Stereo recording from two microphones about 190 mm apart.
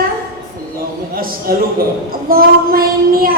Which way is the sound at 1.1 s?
50° right (ahead or behind).